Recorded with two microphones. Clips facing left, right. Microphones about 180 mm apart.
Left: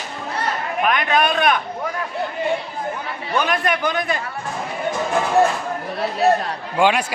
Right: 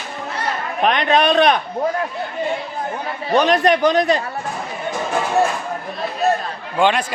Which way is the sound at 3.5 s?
40° right (ahead or behind).